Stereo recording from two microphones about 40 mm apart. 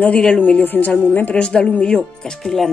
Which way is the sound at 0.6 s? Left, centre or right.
Left.